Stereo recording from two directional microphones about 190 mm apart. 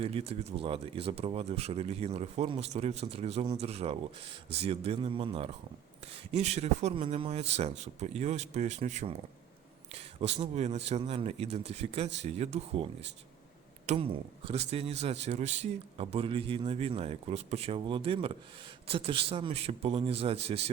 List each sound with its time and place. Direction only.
0.0 s speech: 30° right (ahead or behind)